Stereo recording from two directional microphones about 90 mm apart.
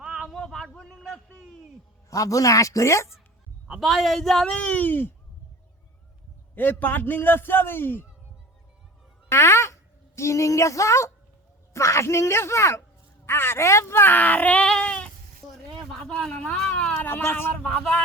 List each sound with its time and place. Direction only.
0.0 s a sound: 5° right (ahead or behind)
2.0 s speech: 40° left (ahead or behind)
3.7 s a man's voice: centre (ahead or behind); by 5.1 s 20° left (ahead or behind)
6.6 s a man's voice: 20° left (ahead or behind)
9.3 s speech: 30° left (ahead or behind); by 16.9 s 10° left (ahead or behind)
16.9 s a man's voice: 25° left (ahead or behind)
17.6 s speech: 10° left (ahead or behind)